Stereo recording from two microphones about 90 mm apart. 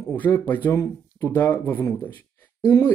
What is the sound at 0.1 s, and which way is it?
Speech, 20° left (ahead or behind).